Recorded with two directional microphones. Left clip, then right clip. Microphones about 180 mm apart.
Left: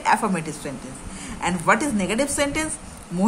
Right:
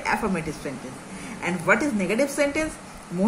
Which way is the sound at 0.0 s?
50° left (ahead or behind).